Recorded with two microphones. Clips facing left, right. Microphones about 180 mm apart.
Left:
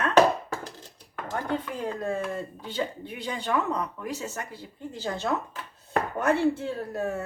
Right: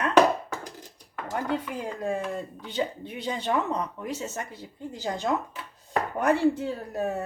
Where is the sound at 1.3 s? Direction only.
15° right (ahead or behind).